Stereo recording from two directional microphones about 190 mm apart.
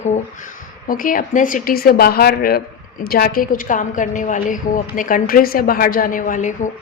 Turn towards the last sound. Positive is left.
turn(degrees=40)  # may be behind; listen again after turning